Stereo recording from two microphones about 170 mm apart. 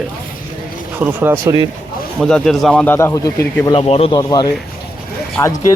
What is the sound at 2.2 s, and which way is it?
Speech, 5° left (ahead or behind).